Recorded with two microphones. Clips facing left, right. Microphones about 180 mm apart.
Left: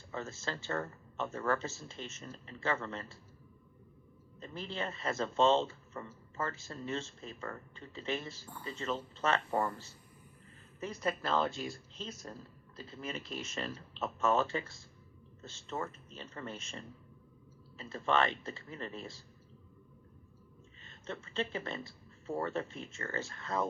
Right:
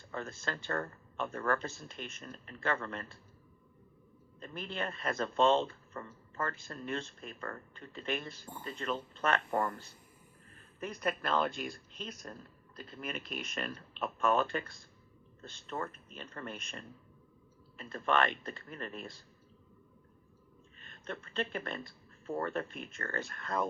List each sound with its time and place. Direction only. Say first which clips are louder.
0.1 s speech: even; 25° left (ahead or behind)
4.4 s speech: even; 25° left (ahead or behind)
10.8 s speech: even; 25° left (ahead or behind)
12.4 s speech: left 1 dB; 60° right (ahead or behind)
13.4 s speech: even; 25° left (ahead or behind)
17.7 s speech: even; 25° left (ahead or behind)
20.9 s a sound: even; 25° left (ahead or behind)
21.3 s speech: even; 25° left (ahead or behind)